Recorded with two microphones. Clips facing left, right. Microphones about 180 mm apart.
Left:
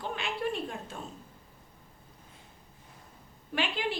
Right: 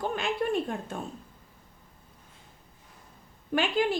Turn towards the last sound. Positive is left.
turn(degrees=-45)  # may be behind; listen again after turning